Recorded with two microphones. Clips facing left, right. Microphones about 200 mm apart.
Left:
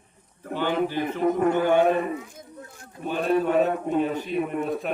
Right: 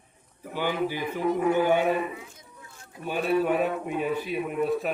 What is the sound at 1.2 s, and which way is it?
Speech, 55° left (ahead or behind).